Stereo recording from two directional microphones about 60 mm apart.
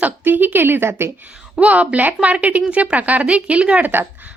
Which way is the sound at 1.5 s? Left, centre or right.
Right.